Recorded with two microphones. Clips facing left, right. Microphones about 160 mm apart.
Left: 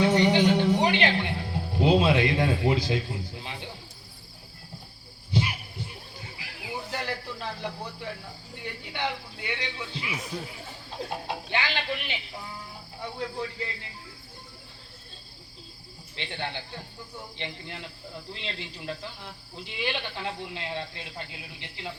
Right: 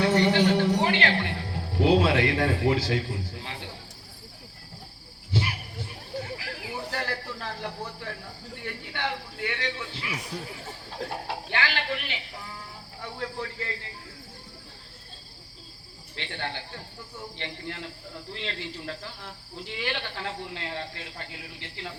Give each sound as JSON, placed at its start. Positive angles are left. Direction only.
{"t": 0.0, "sound": "music", "side_deg": 20}
{"t": 5.3, "sound": "a sound", "side_deg": 20}
{"t": 6.4, "sound": "snake", "side_deg": 15}
{"t": 8.6, "sound": "a man's voice", "side_deg": 20}
{"t": 16.1, "sound": "cricket", "side_deg": 20}